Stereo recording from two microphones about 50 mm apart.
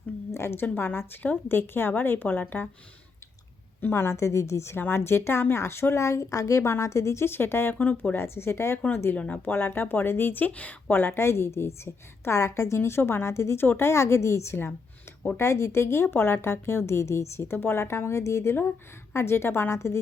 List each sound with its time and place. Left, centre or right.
0.3 s a woman's voice: left
3.9 s speech: left
4.8 s a woman's voice: left
7.3 s a woman's voice: left
7.8 s a woman's voice: left
8.1 s a woman's voice: left
9.1 s speech: left
9.4 s a woman's voice: left
10.4 s a woman's voice: left
10.9 s a woman's voice: left
13.6 s a woman's voice: left
19.1 s a woman's voice: left